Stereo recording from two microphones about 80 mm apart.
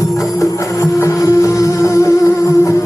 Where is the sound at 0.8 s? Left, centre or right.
Left.